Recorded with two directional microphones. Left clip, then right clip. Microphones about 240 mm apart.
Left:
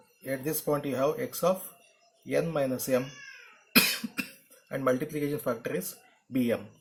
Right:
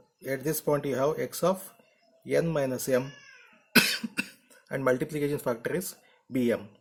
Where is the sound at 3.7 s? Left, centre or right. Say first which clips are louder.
Right 1 dB; right.